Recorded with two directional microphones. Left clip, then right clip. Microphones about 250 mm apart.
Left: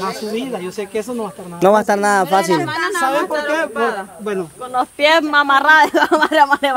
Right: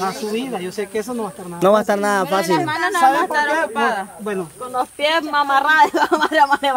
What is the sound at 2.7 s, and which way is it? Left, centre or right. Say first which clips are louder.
A woman's voice: right 2 dB; right.